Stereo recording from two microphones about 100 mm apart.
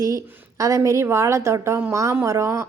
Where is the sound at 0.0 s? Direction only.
35° right (ahead or behind).